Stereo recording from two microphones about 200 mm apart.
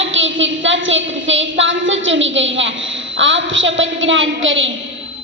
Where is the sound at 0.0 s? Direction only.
70° right (ahead or behind).